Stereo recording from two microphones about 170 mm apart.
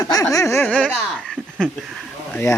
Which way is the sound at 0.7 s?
5° left (ahead or behind).